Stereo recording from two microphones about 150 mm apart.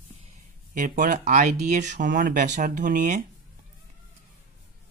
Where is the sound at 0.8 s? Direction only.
60° right (ahead or behind).